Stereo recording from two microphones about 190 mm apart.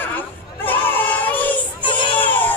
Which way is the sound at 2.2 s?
10° left (ahead or behind).